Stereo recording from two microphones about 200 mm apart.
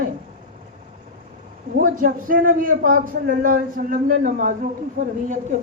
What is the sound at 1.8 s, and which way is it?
Speech, 45° right (ahead or behind).